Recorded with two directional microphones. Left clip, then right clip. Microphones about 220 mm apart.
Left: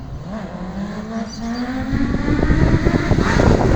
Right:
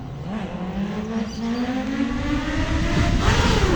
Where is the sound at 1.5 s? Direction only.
60° right (ahead or behind).